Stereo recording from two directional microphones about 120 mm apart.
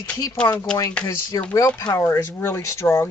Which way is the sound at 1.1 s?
25° left (ahead or behind).